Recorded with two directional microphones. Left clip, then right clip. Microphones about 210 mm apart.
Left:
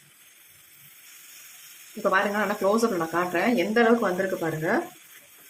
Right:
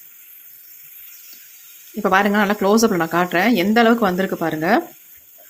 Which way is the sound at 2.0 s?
45° right (ahead or behind).